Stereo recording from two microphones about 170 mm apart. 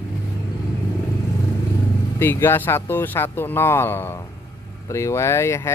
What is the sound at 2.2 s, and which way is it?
Speech, 15° left (ahead or behind).